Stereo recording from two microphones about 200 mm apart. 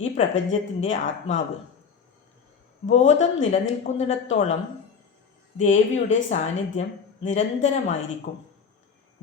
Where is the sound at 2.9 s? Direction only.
35° left (ahead or behind).